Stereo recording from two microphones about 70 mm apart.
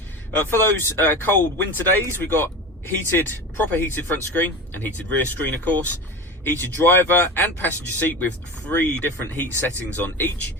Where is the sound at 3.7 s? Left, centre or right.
Left.